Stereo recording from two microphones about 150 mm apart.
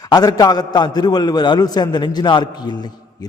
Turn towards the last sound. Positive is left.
turn(degrees=25)  # may be behind; listen again after turning